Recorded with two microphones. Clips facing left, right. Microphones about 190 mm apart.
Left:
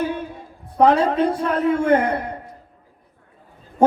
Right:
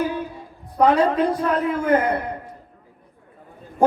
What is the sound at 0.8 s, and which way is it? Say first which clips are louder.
Speech: left 1 dB; 25° left (ahead or behind).